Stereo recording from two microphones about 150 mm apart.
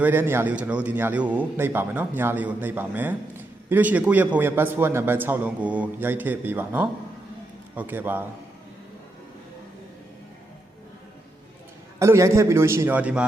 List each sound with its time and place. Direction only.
0.0 s a man's voice: 15° right (ahead or behind)
11.9 s a man's voice: 20° right (ahead or behind)